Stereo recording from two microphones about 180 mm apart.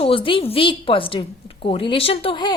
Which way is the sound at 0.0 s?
30° left (ahead or behind).